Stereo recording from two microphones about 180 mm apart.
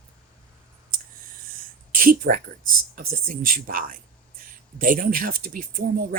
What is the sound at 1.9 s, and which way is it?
Speech, 50° right (ahead or behind).